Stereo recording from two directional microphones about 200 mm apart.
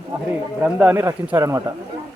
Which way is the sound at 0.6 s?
5° right (ahead or behind).